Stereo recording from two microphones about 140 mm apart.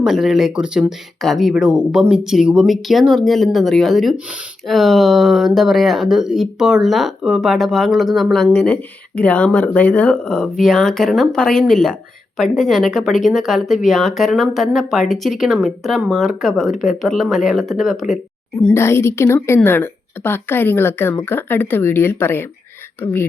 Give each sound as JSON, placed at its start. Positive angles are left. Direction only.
{"t": 0.0, "sound": "speech", "side_deg": -5}
{"t": 18.7, "sound": "a woman's voice", "side_deg": 20}